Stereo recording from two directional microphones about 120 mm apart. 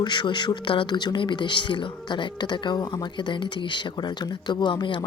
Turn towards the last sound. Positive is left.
turn(degrees=40)  # may be behind; listen again after turning